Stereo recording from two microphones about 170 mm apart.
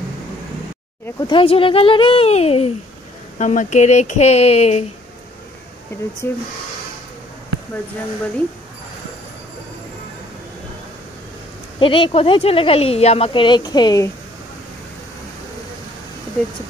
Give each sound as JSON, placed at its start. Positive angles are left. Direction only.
{"t": 1.2, "sound": "speech", "side_deg": 30}
{"t": 6.2, "sound": "speech", "side_deg": 15}
{"t": 11.8, "sound": "speech", "side_deg": 30}